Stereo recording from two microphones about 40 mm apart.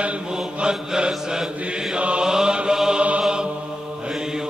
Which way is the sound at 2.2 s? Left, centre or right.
Centre.